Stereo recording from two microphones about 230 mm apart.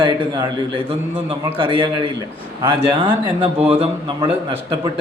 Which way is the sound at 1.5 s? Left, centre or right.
Right.